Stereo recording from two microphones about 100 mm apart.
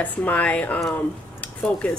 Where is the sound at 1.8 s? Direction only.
10° left (ahead or behind).